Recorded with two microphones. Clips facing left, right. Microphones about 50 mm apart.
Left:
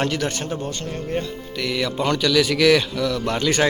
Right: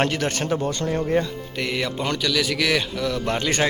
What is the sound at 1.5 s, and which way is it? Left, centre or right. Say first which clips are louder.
Speech: left 2 dB; right.